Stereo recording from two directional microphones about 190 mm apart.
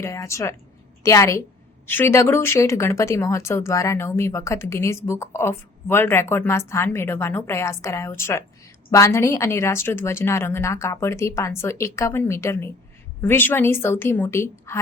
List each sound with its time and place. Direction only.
0.0 s speech: 15° left (ahead or behind)